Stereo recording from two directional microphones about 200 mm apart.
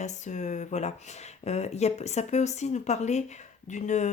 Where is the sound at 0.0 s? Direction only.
35° left (ahead or behind).